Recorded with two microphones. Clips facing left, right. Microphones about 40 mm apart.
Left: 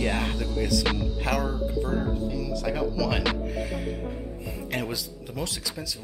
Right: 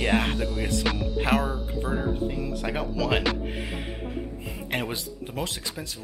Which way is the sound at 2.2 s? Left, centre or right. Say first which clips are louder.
Right 1 dB; right.